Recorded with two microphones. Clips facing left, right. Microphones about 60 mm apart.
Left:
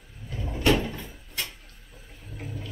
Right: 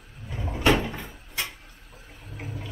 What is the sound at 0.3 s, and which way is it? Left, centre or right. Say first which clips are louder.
Cupboard open or close: right 1 dB; right.